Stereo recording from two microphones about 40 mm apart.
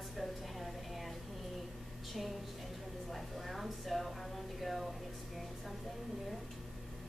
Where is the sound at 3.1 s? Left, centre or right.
Centre.